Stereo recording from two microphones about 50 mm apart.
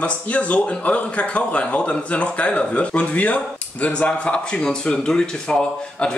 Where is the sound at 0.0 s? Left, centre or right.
Left.